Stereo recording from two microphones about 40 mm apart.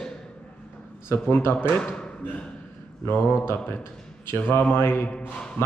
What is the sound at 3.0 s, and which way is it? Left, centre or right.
Speech, left.